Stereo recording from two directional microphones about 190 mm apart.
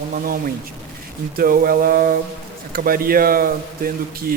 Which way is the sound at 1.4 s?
50° right (ahead or behind).